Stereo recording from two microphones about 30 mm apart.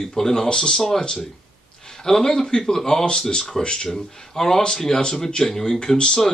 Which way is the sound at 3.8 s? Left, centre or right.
Centre.